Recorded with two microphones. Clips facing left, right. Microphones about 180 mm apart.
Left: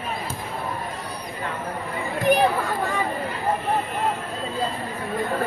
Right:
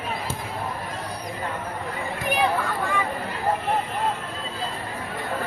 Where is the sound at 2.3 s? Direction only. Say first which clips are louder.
Left 5 dB; 45° left (ahead or behind).